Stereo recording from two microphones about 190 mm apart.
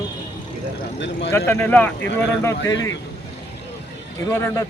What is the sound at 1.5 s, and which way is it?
A man's voice, 10° left (ahead or behind).